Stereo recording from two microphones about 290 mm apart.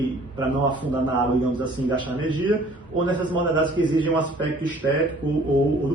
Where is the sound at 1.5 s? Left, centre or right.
Centre.